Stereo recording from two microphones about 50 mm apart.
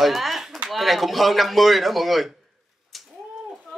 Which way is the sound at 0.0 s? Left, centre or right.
Centre.